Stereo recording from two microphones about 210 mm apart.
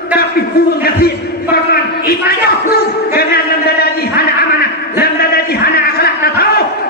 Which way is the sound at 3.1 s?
45° left (ahead or behind).